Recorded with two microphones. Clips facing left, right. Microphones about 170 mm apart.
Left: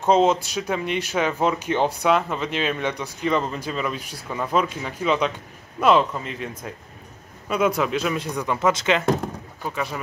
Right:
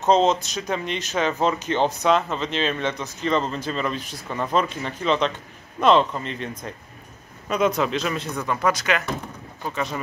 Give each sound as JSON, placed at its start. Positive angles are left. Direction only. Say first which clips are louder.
{"t": 0.0, "sound": "speech", "louder": "left 1 dB", "side_deg": 10}